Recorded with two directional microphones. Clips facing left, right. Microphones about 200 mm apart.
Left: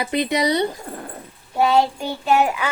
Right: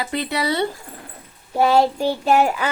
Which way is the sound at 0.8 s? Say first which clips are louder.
Left 7 dB; 50° left (ahead or behind).